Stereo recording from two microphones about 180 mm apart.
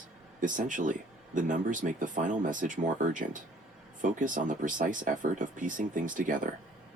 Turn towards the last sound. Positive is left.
turn(degrees=-45)  # may be behind; listen again after turning